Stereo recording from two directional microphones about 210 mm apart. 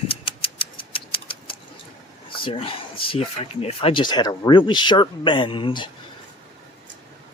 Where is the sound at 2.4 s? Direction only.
25° left (ahead or behind).